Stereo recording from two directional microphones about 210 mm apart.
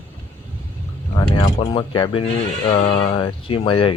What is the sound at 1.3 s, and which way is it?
Speech, 20° left (ahead or behind).